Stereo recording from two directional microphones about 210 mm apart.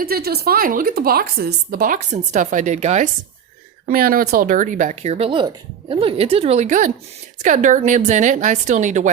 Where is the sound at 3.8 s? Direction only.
45° right (ahead or behind).